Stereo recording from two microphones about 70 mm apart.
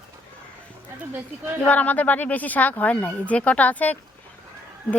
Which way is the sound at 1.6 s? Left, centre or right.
Left.